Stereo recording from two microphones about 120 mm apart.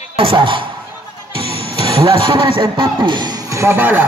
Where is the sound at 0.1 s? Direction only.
50° right (ahead or behind).